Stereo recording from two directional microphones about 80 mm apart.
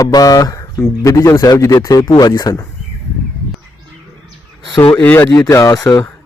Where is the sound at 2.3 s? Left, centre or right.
Left.